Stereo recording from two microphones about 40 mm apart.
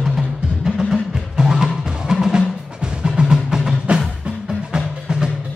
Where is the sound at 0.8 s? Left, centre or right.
Centre.